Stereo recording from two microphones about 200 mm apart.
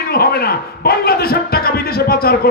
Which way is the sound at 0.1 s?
50° left (ahead or behind).